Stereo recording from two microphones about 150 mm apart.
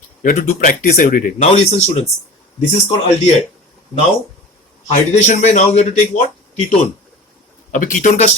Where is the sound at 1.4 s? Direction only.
45° left (ahead or behind).